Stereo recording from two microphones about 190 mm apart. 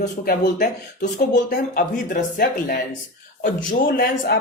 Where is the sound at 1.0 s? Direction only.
40° left (ahead or behind).